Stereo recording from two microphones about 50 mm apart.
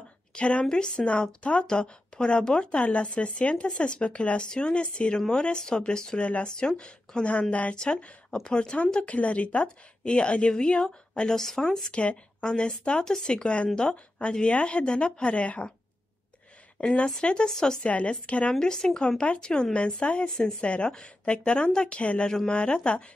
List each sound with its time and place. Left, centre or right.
0.3 s a woman's voice: left
11.3 s speech: centre
11.9 s speech: left
16.8 s speech: left
17.8 s speech: left
18.6 s speech: centre